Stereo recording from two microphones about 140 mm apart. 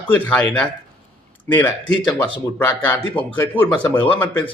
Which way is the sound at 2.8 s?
10° left (ahead or behind).